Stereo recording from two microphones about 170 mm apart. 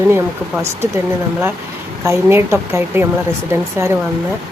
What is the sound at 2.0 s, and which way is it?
Speech, 15° right (ahead or behind).